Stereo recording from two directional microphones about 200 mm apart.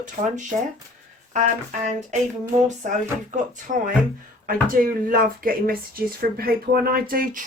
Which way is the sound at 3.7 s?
40° right (ahead or behind).